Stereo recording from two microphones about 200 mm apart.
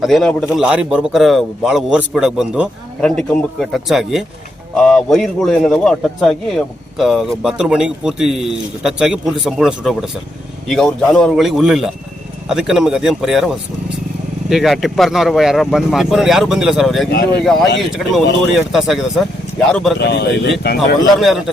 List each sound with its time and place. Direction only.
0.0 s a man's voice: centre (ahead or behind)
17.1 s speech: 55° left (ahead or behind)
17.4 s a man's voice: centre (ahead or behind)
20.0 s speech: 55° left (ahead or behind)
21.2 s a man's voice: centre (ahead or behind)